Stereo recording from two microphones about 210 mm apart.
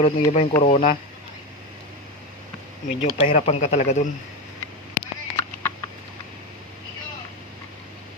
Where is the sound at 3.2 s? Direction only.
30° left (ahead or behind).